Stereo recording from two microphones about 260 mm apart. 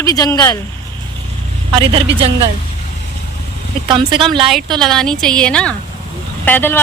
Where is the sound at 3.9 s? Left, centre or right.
Centre.